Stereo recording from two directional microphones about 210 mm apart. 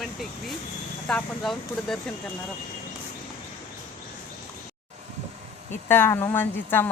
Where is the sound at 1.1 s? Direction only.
Centre (ahead or behind).